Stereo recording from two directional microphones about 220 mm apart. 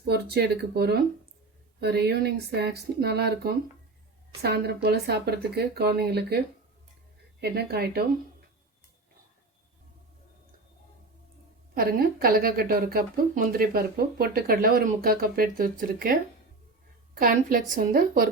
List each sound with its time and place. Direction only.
0.0 s speech: 45° right (ahead or behind)
7.4 s speech: 45° right (ahead or behind)
11.7 s a woman's voice: 40° right (ahead or behind)
17.2 s a woman's voice: 40° right (ahead or behind)